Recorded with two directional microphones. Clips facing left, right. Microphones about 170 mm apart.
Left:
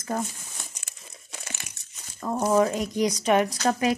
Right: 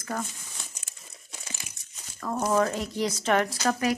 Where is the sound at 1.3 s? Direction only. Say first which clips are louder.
Left 3 dB; 70° left (ahead or behind).